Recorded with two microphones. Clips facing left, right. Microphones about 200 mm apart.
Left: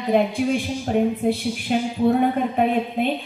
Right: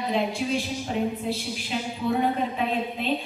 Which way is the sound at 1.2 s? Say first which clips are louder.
Left 8 dB; 55° left (ahead or behind).